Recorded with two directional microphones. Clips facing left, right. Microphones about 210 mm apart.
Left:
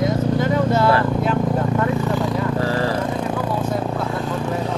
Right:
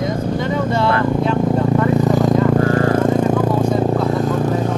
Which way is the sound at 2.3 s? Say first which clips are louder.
Right 7 dB; 50° right (ahead or behind).